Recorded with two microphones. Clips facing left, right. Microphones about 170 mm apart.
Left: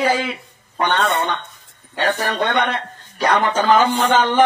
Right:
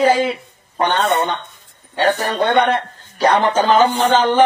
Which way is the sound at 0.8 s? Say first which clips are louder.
Right 2 dB; 35° right (ahead or behind).